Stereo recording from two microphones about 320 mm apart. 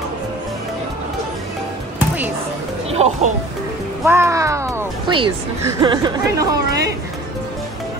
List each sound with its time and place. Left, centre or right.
2.9 s speech: centre
4.0 s speech: centre